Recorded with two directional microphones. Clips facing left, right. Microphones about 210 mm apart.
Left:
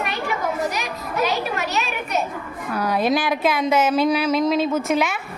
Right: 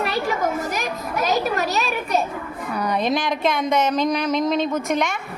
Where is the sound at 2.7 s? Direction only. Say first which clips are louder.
Left 2 dB; 5° left (ahead or behind).